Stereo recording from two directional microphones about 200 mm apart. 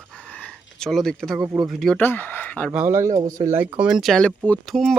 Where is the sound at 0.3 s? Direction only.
5° left (ahead or behind).